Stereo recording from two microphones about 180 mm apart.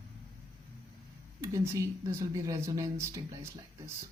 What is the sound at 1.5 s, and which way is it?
Speech, 15° right (ahead or behind).